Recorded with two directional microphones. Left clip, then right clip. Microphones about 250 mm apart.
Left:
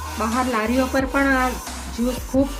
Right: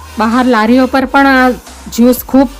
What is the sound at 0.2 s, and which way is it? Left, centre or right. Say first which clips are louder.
Speech: right 12 dB; right.